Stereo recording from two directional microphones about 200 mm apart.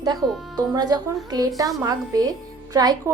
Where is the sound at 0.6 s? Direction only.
20° right (ahead or behind).